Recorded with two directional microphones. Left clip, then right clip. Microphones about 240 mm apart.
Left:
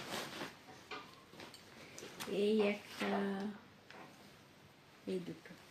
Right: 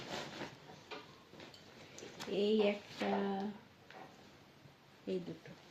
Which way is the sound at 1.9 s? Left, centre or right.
Centre.